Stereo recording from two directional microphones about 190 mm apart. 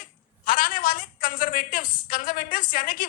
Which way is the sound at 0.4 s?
45° left (ahead or behind).